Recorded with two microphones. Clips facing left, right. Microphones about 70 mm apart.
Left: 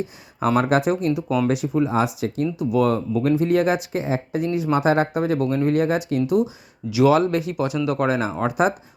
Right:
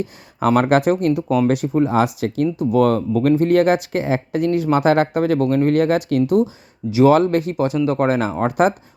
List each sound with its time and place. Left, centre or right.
0.0 s speech: right
2.6 s speech: right